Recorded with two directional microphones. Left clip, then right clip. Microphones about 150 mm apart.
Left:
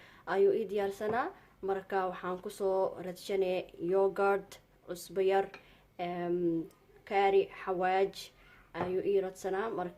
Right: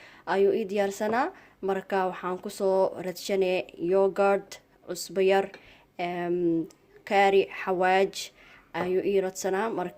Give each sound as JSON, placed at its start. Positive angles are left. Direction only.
{"t": 0.0, "sound": "a woman's voice", "side_deg": -35}